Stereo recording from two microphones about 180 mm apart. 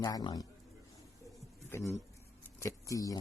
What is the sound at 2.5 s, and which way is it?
Speech, 20° left (ahead or behind).